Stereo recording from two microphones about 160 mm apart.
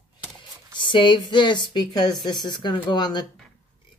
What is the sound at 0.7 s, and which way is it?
Speech, 30° left (ahead or behind).